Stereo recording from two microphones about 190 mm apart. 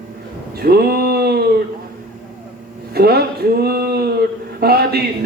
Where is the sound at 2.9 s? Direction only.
55° right (ahead or behind).